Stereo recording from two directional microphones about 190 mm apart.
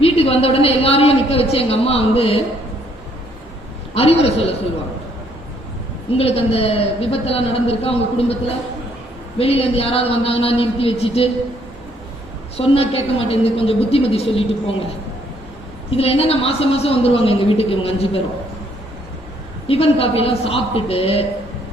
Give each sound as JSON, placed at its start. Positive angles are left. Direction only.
{"t": 0.0, "sound": "a woman's voice", "side_deg": 30}
{"t": 3.9, "sound": "a woman's voice", "side_deg": 30}
{"t": 6.1, "sound": "a woman's voice", "side_deg": 30}
{"t": 12.5, "sound": "a woman's voice", "side_deg": 30}
{"t": 15.9, "sound": "a woman's voice", "side_deg": 30}
{"t": 19.6, "sound": "a woman's voice", "side_deg": 30}